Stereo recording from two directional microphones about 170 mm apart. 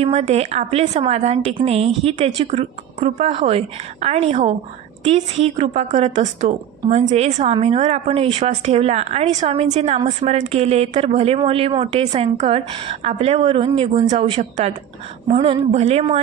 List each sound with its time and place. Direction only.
0.0 s speech: 35° right (ahead or behind)